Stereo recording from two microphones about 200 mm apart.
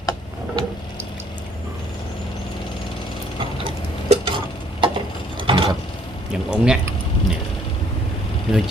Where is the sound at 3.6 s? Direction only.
35° right (ahead or behind).